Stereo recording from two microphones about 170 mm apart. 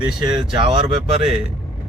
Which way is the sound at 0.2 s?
25° right (ahead or behind).